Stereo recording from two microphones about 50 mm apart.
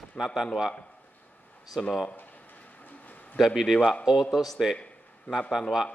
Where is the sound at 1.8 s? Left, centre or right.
Centre.